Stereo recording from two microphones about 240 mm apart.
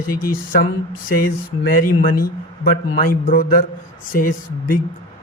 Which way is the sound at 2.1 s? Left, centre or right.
Left.